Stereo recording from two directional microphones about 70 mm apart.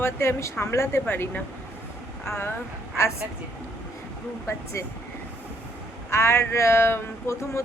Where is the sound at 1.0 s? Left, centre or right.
Left.